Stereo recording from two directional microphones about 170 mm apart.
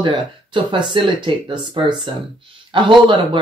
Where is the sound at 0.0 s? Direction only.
30° right (ahead or behind).